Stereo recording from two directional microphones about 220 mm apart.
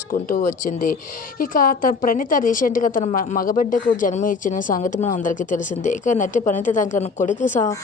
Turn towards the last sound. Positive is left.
turn(degrees=35)  # may be behind; listen again after turning